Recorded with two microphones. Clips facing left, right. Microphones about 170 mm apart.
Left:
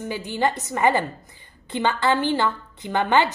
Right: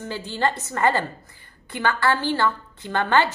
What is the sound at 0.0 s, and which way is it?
A woman's voice, 15° left (ahead or behind).